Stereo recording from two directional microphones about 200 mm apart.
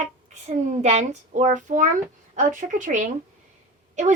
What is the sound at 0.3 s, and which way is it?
A woman's voice, 35° right (ahead or behind).